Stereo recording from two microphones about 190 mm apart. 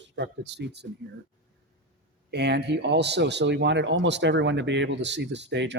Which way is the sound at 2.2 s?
60° right (ahead or behind).